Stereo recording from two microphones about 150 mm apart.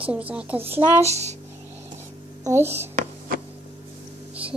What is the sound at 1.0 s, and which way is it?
Speech, 45° right (ahead or behind).